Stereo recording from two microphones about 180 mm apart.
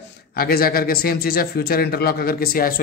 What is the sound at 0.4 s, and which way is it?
A man's voice, 55° left (ahead or behind).